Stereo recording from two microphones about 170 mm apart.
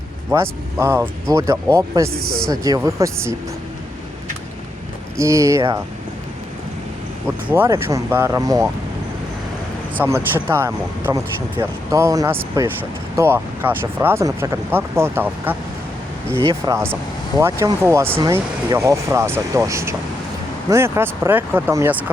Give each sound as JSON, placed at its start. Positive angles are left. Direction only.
{"t": 0.8, "sound": "speech", "side_deg": -15}
{"t": 5.1, "sound": "speech", "side_deg": -15}
{"t": 7.4, "sound": "speech", "side_deg": -15}
{"t": 10.0, "sound": "speech", "side_deg": -10}
{"t": 16.4, "sound": "speech", "side_deg": -25}